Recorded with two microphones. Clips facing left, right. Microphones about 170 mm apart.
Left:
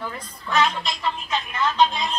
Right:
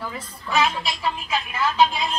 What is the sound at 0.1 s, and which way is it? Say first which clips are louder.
A woman's voice: right 1 dB; 5° right (ahead or behind).